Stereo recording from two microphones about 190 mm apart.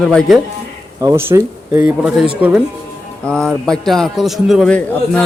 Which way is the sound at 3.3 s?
5° left (ahead or behind).